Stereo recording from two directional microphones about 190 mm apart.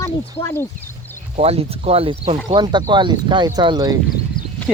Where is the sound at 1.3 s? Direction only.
30° right (ahead or behind).